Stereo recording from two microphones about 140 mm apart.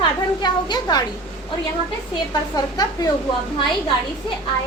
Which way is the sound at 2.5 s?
25° left (ahead or behind).